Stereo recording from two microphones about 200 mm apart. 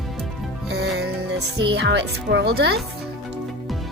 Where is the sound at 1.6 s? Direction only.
60° right (ahead or behind).